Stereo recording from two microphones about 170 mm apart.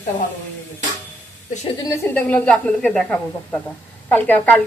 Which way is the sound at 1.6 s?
20° left (ahead or behind).